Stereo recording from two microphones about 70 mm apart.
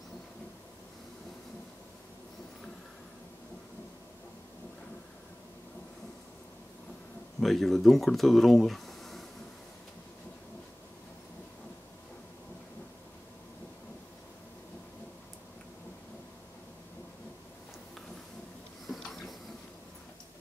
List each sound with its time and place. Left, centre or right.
7.3 s speech: centre
18.9 s printer: centre